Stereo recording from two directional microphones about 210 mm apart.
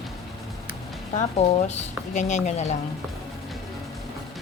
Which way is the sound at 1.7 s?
35° left (ahead or behind).